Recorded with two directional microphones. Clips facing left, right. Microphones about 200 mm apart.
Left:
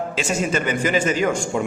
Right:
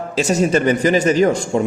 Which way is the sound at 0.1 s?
40° right (ahead or behind).